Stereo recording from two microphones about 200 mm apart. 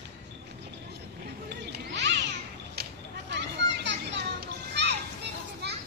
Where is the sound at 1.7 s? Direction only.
60° right (ahead or behind).